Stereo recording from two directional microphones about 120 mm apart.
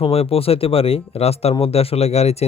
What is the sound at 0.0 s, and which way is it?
Speech, 55° left (ahead or behind).